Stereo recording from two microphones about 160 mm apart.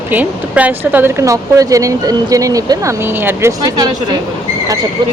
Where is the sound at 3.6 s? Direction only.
25° right (ahead or behind).